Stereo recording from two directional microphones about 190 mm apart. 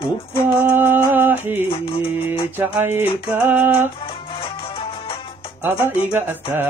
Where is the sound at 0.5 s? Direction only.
10° right (ahead or behind).